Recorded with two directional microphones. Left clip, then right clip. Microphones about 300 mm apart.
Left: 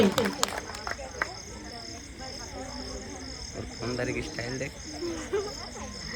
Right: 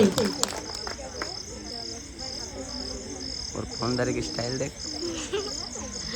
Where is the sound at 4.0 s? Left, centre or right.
Centre.